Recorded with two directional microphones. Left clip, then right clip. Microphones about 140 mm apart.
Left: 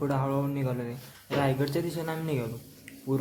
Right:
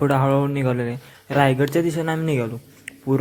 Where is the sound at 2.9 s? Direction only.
45° right (ahead or behind).